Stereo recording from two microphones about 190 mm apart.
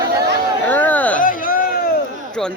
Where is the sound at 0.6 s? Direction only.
10° left (ahead or behind).